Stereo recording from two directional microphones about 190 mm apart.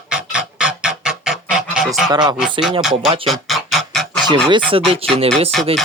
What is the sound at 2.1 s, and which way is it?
Speech, 20° right (ahead or behind).